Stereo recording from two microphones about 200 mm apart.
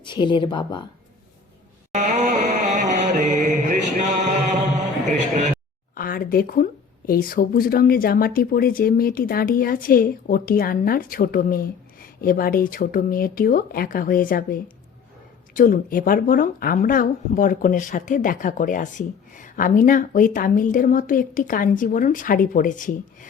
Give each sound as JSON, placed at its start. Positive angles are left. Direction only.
{"t": 0.0, "sound": "speech", "side_deg": 25}
{"t": 1.9, "sound": "music", "side_deg": -35}
{"t": 5.0, "sound": "a man's voice", "side_deg": -35}
{"t": 5.9, "sound": "speech", "side_deg": 45}